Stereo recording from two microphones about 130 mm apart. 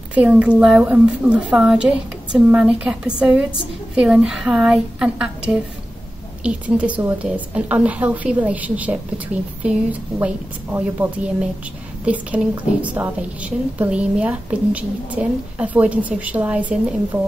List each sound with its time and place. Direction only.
0.1 s a woman's voice: 10° right (ahead or behind)